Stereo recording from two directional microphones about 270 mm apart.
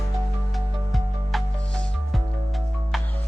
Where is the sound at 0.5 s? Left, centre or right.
Centre.